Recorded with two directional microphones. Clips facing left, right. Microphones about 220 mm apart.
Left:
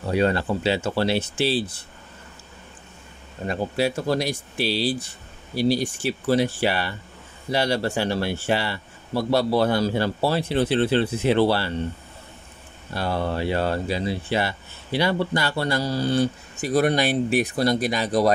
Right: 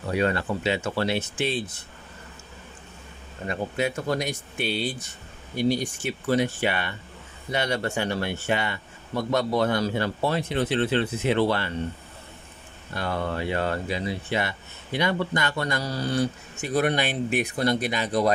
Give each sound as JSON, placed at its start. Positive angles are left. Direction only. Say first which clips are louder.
{"t": 0.1, "sound": "speech", "louder": "left 3 dB", "side_deg": 30}
{"t": 3.4, "sound": "speech", "louder": "left 3 dB", "side_deg": 35}
{"t": 12.9, "sound": "speech", "louder": "left 3 dB", "side_deg": 35}
{"t": 16.6, "sound": "speech", "louder": "left 4 dB", "side_deg": 35}